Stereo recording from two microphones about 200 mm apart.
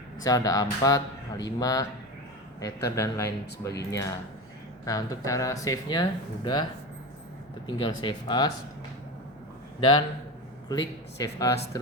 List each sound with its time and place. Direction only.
0.3 s speech: 20° left (ahead or behind)
7.8 s speech: 25° left (ahead or behind)
10.7 s speech: 20° left (ahead or behind)